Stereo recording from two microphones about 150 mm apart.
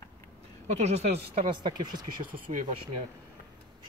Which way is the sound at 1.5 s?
30° right (ahead or behind).